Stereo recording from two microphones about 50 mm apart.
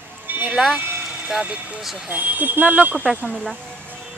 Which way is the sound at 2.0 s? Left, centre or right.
Right.